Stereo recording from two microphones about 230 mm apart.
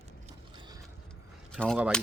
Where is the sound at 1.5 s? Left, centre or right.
Centre.